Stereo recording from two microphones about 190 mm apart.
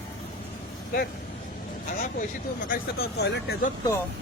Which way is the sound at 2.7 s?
55° left (ahead or behind).